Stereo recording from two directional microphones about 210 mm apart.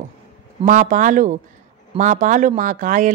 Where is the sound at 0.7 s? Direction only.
40° right (ahead or behind).